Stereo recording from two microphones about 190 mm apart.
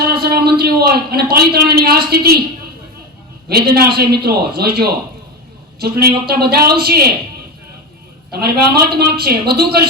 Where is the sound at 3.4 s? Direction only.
55° right (ahead or behind).